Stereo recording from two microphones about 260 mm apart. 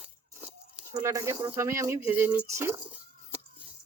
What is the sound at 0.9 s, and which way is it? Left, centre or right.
Speech, centre.